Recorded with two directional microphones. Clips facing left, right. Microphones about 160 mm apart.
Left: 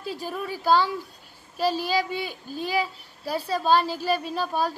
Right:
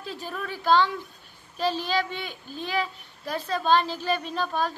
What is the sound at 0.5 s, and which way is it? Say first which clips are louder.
Child singing: even; 10° left (ahead or behind).